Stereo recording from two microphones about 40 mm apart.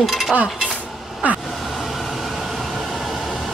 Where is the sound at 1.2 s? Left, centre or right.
Right.